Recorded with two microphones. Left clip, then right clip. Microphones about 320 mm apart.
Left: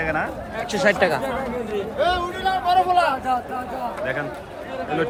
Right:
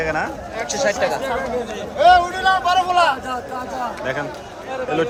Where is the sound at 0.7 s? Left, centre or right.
Left.